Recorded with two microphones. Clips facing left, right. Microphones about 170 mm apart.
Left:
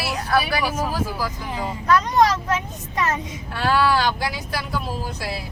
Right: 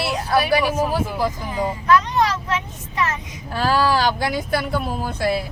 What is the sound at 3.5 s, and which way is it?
Speech, 40° right (ahead or behind).